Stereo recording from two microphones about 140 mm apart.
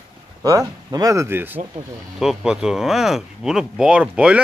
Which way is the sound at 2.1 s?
5° right (ahead or behind).